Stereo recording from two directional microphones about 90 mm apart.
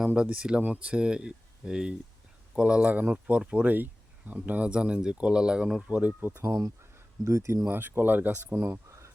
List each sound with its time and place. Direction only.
0.0 s speech: 15° right (ahead or behind)
6.4 s speech: 40° right (ahead or behind); by 8.6 s 15° right (ahead or behind)